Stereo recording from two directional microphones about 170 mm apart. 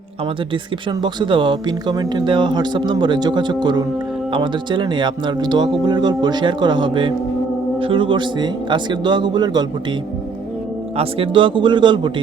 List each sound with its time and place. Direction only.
0.5 s speech: 25° right (ahead or behind)
10.9 s speech: 35° right (ahead or behind)